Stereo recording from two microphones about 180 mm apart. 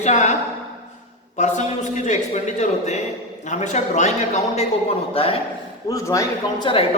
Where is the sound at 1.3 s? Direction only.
40° left (ahead or behind).